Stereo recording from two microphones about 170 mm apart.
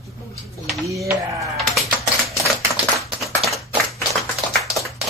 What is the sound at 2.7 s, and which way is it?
Tap, centre (ahead or behind).